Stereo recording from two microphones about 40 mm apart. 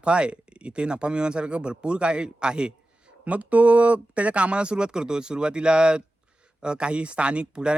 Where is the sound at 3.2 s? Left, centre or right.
Right.